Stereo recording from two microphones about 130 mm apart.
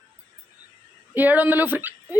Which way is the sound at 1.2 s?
15° right (ahead or behind).